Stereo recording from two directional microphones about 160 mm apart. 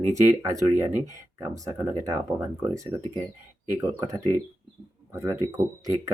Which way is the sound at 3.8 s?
20° right (ahead or behind).